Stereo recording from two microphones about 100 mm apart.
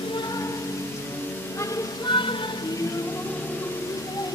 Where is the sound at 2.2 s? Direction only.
55° left (ahead or behind).